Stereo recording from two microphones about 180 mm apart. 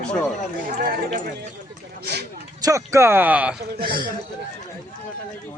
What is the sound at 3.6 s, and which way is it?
Speech, 55° right (ahead or behind).